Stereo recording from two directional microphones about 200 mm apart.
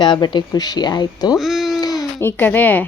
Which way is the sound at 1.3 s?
Centre (ahead or behind).